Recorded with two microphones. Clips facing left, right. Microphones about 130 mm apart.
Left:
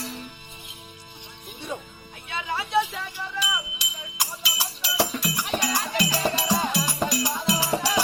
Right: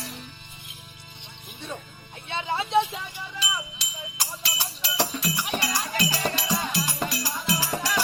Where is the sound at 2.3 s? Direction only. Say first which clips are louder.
Right 1 dB; 25° right (ahead or behind).